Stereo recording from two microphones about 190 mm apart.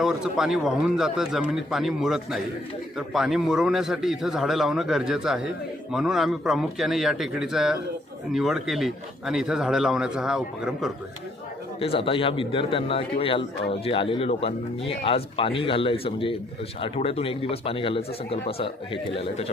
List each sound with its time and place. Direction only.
0.0 s speech: centre (ahead or behind)
11.8 s speech: 30° left (ahead or behind)